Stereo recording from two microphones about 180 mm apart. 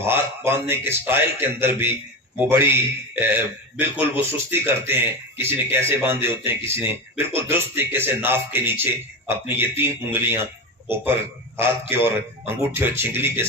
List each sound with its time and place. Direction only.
0.0 s a man's voice: 15° right (ahead or behind)